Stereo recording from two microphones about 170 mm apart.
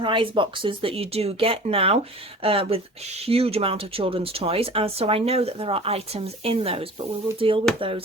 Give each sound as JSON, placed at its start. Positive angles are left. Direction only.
{"t": 0.0, "sound": "speech", "side_deg": -30}